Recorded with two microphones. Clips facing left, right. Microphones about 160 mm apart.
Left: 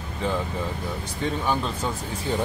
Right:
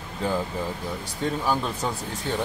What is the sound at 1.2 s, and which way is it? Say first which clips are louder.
Speech: even; 5° right (ahead or behind).